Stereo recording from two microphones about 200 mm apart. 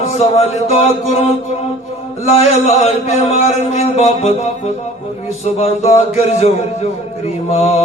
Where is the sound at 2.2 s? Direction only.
30° left (ahead or behind).